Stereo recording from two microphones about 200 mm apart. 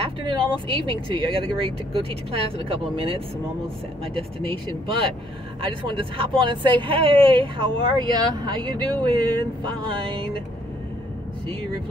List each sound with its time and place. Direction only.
0.0 s speech: 25° right (ahead or behind)